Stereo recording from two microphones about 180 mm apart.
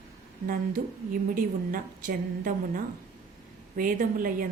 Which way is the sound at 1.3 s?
50° right (ahead or behind).